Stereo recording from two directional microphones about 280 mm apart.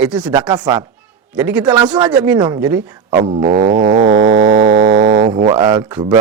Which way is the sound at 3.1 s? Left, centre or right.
Right.